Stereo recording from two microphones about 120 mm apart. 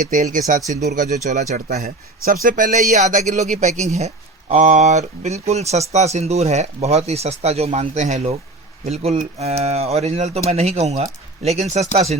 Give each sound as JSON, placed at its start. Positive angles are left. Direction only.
{"t": 0.2, "sound": "speech", "side_deg": -90}